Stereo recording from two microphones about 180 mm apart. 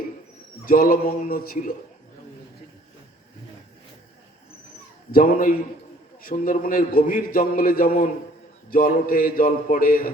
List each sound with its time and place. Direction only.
0.6 s a man's voice: 50° left (ahead or behind)
5.1 s a man's voice: 55° left (ahead or behind)